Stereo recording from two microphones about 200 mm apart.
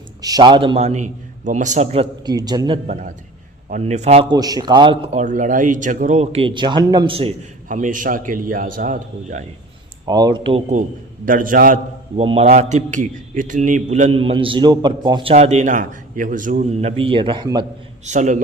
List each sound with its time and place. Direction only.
0.2 s a man's voice: 20° right (ahead or behind)
2.3 s a man's voice: 20° right (ahead or behind)
7.7 s a man's voice: 40° right (ahead or behind)
10.1 s a man's voice: 20° right (ahead or behind)
11.3 s a man's voice: 45° right (ahead or behind)
12.2 s a man's voice: 30° right (ahead or behind)
18.0 s a man's voice: 35° right (ahead or behind)